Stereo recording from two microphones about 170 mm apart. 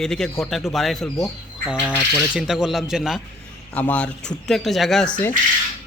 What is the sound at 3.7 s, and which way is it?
Speech, 10° left (ahead or behind).